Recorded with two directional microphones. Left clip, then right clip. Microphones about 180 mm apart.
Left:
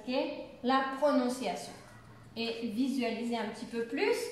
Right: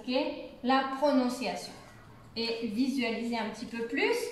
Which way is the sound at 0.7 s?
15° left (ahead or behind).